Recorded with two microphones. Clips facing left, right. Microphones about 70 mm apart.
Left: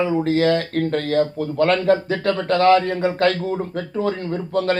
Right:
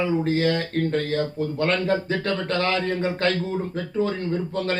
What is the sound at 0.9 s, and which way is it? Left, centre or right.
Speech, left.